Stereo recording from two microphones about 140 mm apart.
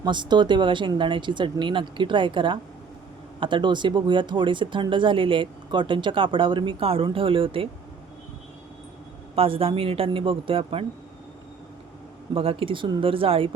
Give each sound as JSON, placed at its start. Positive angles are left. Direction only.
{"t": 0.0, "sound": "speech", "side_deg": -35}
{"t": 9.3, "sound": "speech", "side_deg": -40}
{"t": 12.3, "sound": "speech", "side_deg": -40}